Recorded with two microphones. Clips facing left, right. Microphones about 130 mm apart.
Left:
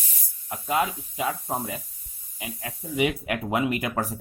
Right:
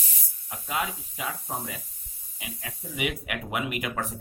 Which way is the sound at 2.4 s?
35° left (ahead or behind).